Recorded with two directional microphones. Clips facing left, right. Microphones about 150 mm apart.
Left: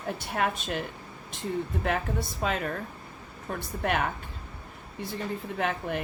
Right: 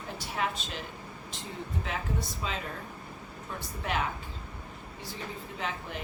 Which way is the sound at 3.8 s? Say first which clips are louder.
Left 4 dB; 60° left (ahead or behind).